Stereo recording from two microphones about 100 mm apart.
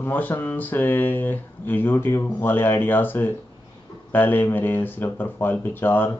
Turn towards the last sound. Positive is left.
turn(degrees=20)  # may be behind; listen again after turning